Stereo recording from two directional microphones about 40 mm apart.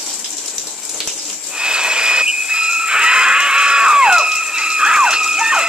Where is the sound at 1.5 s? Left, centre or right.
Right.